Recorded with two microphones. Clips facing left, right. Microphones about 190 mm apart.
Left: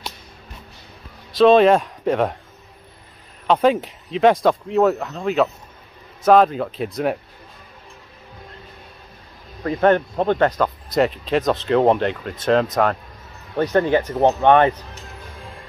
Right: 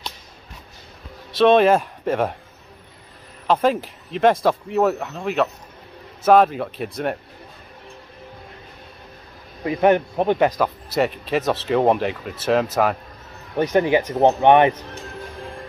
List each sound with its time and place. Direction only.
1.3 s speech: centre (ahead or behind)
3.4 s speech: centre (ahead or behind)
9.6 s speech: 10° right (ahead or behind)